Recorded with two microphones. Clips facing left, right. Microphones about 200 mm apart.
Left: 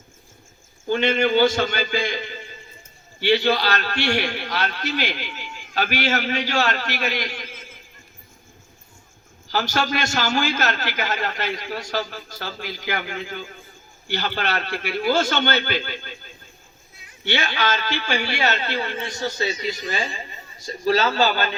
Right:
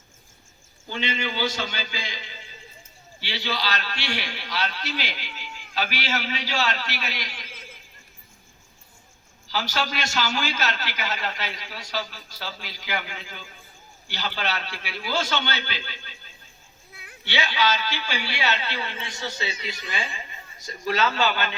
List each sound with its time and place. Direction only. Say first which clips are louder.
0.9 s a man's voice: left 10 dB; 55° left (ahead or behind)
9.5 s a man's voice: left 5 dB; 50° left (ahead or behind)
16.9 s a sound: right 8 dB; 60° right (ahead or behind)
17.2 s a man's voice: left 1 dB; 50° left (ahead or behind); by 21.5 s 35° left (ahead or behind)